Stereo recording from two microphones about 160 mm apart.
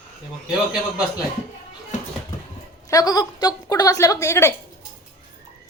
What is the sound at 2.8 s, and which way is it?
A woman's voice, 25° left (ahead or behind).